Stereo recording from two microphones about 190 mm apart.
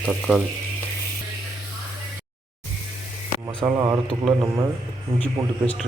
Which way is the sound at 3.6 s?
20° right (ahead or behind).